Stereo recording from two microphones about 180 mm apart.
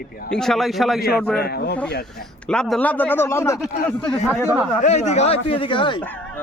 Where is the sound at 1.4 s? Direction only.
60° left (ahead or behind).